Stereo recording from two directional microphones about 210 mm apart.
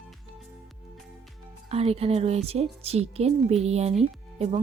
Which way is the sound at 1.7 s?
30° right (ahead or behind).